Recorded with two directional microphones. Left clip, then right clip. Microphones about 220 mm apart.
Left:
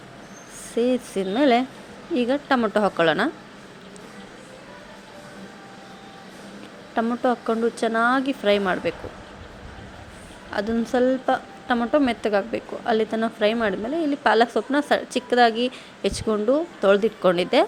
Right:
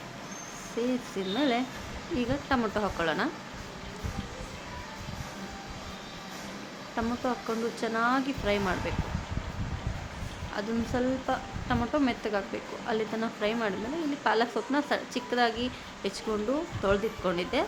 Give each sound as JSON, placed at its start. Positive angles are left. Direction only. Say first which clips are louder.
{"t": 0.8, "sound": "a woman's voice", "louder": "left 9 dB", "side_deg": 30}
{"t": 6.9, "sound": "a woman's voice", "louder": "left 9 dB", "side_deg": 25}
{"t": 10.5, "sound": "a woman's voice", "louder": "left 9 dB", "side_deg": 25}